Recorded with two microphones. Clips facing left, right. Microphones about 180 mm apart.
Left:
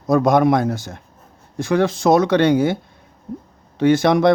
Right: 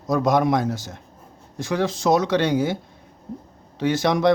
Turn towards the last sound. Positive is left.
turn(degrees=60)  # may be behind; listen again after turning